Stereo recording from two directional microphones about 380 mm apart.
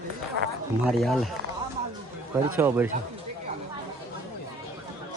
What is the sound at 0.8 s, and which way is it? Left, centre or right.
Speech, centre.